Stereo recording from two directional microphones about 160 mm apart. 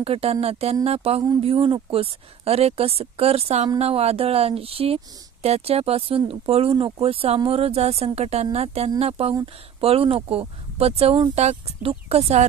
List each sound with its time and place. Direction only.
0.0 s speech: 40° right (ahead or behind)